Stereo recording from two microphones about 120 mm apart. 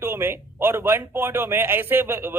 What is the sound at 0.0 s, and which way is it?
Speech, 20° right (ahead or behind).